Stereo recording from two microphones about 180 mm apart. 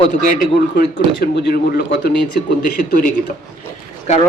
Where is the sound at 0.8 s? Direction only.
70° left (ahead or behind).